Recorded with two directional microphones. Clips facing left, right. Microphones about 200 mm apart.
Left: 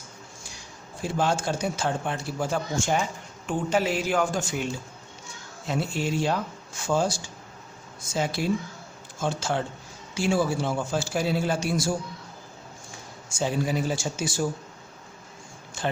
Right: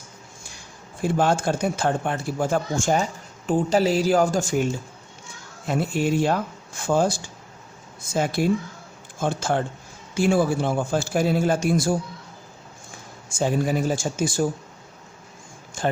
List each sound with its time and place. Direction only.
1.0 s a man's voice: 55° right (ahead or behind)
13.4 s a man's voice: 50° right (ahead or behind)